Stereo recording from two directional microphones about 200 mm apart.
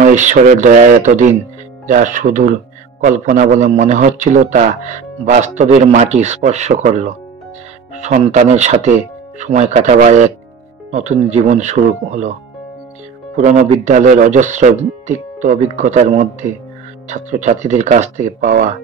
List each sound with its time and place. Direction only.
0.0 s a man's voice: 35° right (ahead or behind)
13.4 s a man's voice: 40° right (ahead or behind)